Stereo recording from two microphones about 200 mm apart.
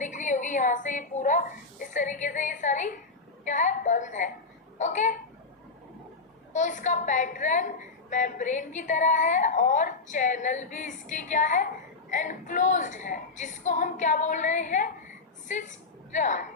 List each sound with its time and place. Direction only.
0.0 s a woman's voice: 40° left (ahead or behind)
6.5 s a woman's voice: 40° left (ahead or behind)